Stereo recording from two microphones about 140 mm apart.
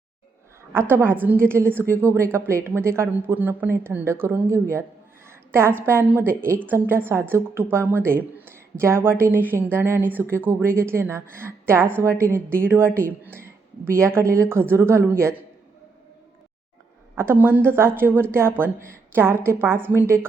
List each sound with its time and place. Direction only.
0.7 s a woman's voice: 15° right (ahead or behind)
17.4 s a woman's voice: 15° right (ahead or behind)